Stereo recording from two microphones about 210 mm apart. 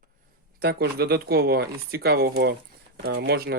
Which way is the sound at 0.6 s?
50° right (ahead or behind).